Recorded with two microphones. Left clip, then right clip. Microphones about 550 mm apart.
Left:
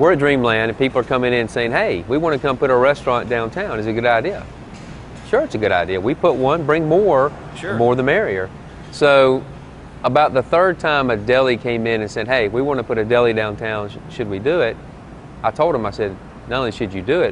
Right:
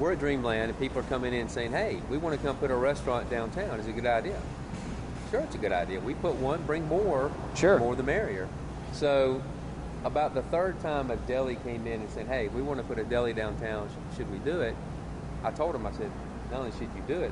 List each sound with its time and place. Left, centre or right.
0.0 s speech: left
5.3 s speech: left